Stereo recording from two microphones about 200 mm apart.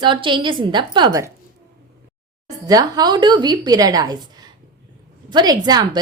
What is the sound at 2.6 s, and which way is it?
A woman's voice, 20° right (ahead or behind).